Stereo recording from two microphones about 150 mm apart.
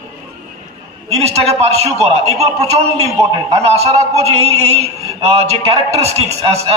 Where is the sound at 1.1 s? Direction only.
45° right (ahead or behind).